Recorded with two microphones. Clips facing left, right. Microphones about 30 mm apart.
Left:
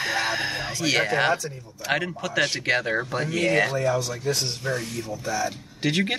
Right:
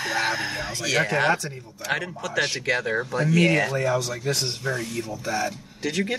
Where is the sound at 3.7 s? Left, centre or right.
Right.